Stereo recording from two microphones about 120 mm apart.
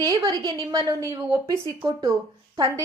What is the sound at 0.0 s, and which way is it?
A woman's voice, 35° right (ahead or behind).